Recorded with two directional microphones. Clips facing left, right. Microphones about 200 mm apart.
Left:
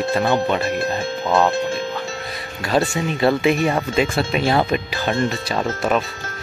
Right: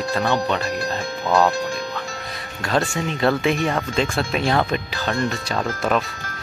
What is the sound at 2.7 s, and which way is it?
Speech, 5° left (ahead or behind).